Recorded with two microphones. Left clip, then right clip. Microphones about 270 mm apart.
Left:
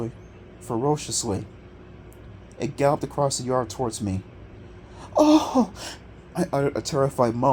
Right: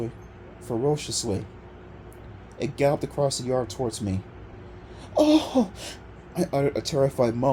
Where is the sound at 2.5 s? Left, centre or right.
Left.